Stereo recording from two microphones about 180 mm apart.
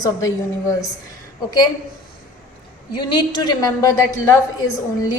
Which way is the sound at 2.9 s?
25° left (ahead or behind).